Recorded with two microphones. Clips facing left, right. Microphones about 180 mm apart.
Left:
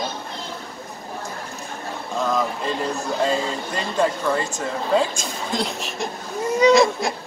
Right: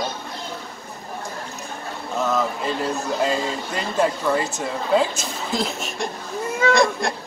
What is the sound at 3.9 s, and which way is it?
Speech, 5° right (ahead or behind).